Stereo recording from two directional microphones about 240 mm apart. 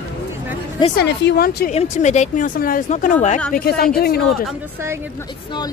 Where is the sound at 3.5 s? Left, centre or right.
Left.